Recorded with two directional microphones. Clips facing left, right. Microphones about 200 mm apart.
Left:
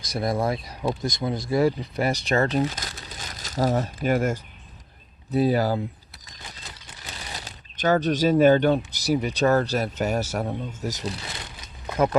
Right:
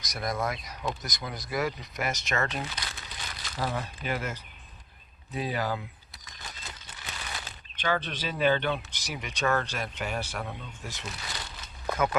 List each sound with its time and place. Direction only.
0.0 s speech: 30° left (ahead or behind)
7.3 s speech: 40° left (ahead or behind)